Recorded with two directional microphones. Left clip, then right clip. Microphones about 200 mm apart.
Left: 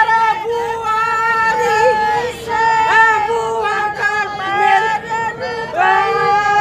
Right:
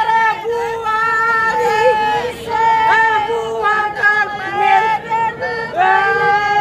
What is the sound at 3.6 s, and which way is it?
Singing, 5° left (ahead or behind).